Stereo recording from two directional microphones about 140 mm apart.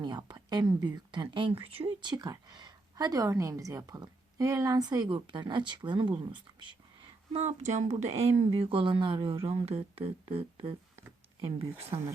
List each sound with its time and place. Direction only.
0.0 s speech: 30° right (ahead or behind)
7.3 s speech: 55° right (ahead or behind); by 12.1 s 40° right (ahead or behind)